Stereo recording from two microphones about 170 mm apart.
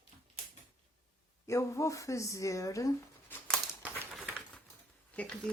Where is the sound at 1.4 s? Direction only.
15° left (ahead or behind).